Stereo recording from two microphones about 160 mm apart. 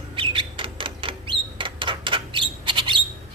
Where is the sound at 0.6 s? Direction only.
35° right (ahead or behind).